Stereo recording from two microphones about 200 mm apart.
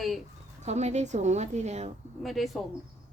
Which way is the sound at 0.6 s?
35° right (ahead or behind).